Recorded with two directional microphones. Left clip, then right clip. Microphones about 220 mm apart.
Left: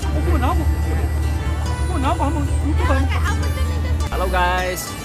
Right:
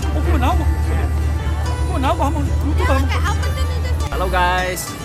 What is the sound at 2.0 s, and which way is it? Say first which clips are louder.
Music: right 2 dB; 50° right (ahead or behind).